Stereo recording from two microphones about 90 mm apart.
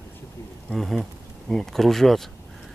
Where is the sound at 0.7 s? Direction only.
Centre (ahead or behind).